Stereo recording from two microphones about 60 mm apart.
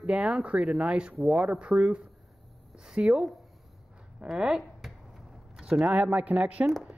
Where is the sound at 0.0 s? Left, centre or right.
Centre.